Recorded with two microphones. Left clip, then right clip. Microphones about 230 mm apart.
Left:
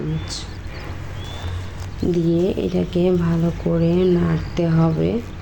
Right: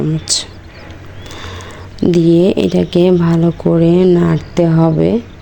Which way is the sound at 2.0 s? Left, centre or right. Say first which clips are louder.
Right 9 dB; right.